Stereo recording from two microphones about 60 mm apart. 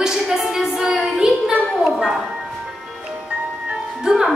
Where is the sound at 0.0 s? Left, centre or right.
Centre.